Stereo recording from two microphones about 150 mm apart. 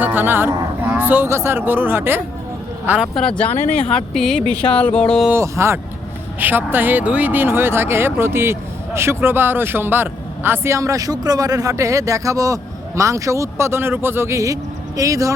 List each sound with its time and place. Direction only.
0.0 s speech: 15° right (ahead or behind)
3.2 s speech: 5° left (ahead or behind)
5.3 s a man's voice: 20° right (ahead or behind)